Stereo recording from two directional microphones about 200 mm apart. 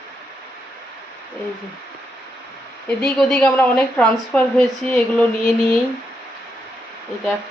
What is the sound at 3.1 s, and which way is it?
A woman's voice, 5° left (ahead or behind).